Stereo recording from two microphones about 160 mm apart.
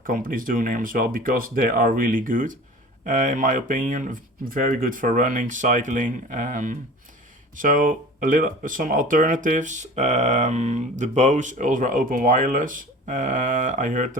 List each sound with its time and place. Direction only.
0.0 s speech: 60° right (ahead or behind)